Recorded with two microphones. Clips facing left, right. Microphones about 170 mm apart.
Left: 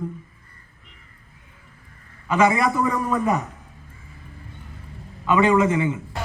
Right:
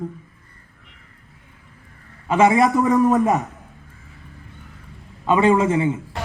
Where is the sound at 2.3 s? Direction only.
30° right (ahead or behind).